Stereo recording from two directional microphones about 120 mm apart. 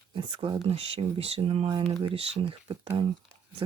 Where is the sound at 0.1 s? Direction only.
40° right (ahead or behind).